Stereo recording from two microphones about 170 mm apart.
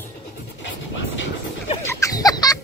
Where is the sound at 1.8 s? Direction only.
20° left (ahead or behind).